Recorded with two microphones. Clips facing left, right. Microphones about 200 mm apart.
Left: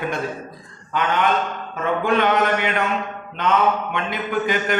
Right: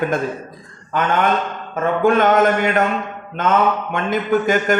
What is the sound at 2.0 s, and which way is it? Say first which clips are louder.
Speech: right 6 dB; 45° right (ahead or behind).